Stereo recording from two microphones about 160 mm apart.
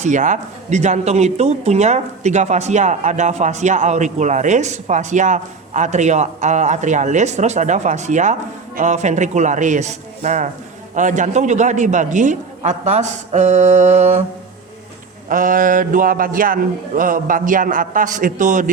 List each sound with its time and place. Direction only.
0.0 s speech: 50° right (ahead or behind)
15.3 s a man's voice: 60° right (ahead or behind)